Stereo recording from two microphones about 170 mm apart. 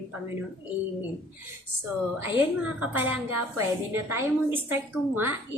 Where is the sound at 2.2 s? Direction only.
10° right (ahead or behind).